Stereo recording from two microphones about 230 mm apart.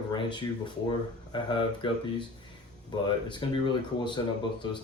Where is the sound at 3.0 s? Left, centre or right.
Left.